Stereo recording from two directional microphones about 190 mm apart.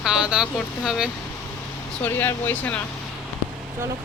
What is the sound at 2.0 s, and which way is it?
Speech, 10° left (ahead or behind).